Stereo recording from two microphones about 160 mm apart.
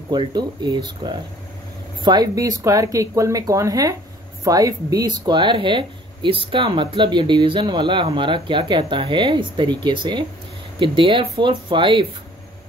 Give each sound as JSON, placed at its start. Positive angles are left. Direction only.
{"t": 0.1, "sound": "speech", "side_deg": -30}